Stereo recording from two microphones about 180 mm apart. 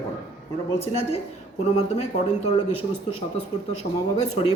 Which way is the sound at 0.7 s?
35° left (ahead or behind).